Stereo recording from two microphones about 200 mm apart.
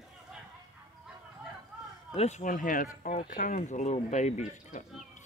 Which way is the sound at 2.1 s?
35° left (ahead or behind).